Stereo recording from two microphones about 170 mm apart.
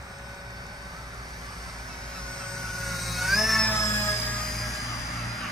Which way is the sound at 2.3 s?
5° left (ahead or behind).